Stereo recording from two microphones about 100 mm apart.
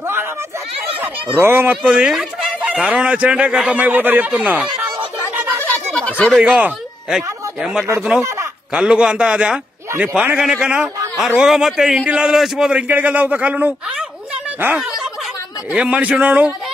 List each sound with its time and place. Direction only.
1.4 s speech: 25° right (ahead or behind)
1.8 s a man's voice: 5° right (ahead or behind)
5.6 s a sound: 15° left (ahead or behind)
6.4 s a man's voice: 15° right (ahead or behind)